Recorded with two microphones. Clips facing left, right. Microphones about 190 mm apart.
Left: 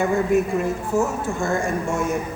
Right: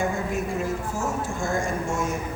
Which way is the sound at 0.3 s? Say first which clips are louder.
Left 7 dB; 65° left (ahead or behind).